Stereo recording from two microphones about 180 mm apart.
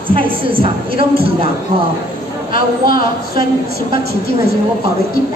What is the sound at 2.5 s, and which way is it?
Speech, 55° left (ahead or behind).